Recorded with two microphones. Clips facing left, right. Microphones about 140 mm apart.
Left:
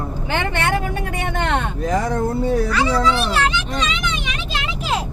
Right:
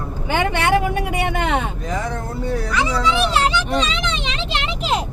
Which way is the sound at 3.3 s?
35° right (ahead or behind).